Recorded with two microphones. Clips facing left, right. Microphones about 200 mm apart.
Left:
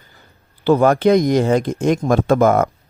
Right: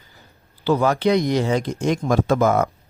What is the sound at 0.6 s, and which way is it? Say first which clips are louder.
Speech: left 5 dB; 55° left (ahead or behind).